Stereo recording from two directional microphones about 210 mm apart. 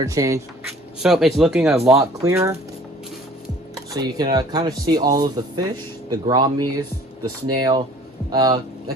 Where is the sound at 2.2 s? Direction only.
15° right (ahead or behind).